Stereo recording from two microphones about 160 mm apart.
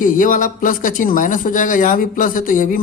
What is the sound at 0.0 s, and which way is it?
Speech, 55° left (ahead or behind).